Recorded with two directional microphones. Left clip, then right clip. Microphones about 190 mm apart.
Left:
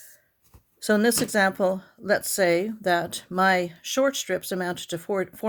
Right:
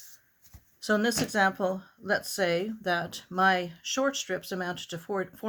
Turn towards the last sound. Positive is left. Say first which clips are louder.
# left 6 dB
turn(degrees=40)  # may be behind; listen again after turning